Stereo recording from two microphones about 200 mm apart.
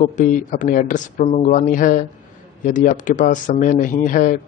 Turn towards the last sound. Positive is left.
turn(degrees=40)  # may be behind; listen again after turning